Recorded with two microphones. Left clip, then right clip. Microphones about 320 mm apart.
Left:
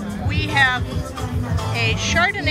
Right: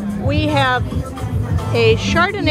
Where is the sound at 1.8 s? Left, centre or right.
Centre.